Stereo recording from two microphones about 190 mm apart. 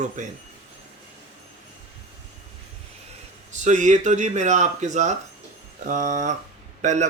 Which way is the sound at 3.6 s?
40° right (ahead or behind).